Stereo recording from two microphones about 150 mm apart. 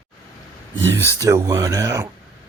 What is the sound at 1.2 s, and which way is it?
Speech, 25° right (ahead or behind).